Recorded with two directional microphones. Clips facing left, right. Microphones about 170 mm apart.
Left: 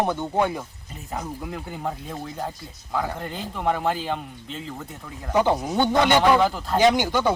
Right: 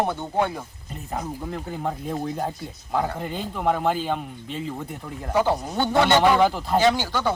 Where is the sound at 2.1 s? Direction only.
10° right (ahead or behind).